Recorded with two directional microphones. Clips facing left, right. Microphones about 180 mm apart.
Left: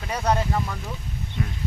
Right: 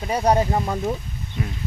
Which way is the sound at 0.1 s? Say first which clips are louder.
Right 5 dB; 30° right (ahead or behind).